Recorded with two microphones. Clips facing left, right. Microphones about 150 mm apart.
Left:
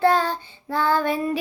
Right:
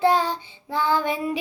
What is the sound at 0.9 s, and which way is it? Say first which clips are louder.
Female singing: left 1 dB; 15° right (ahead or behind).